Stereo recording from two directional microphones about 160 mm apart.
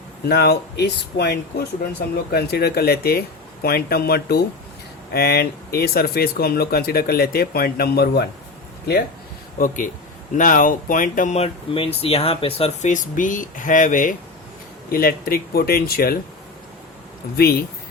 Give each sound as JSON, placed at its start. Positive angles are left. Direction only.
{"t": 0.3, "sound": "speech", "side_deg": 85}
{"t": 9.6, "sound": "speech", "side_deg": 60}
{"t": 12.9, "sound": "speech", "side_deg": 55}
{"t": 14.9, "sound": "speech", "side_deg": 65}
{"t": 17.3, "sound": "speech", "side_deg": 75}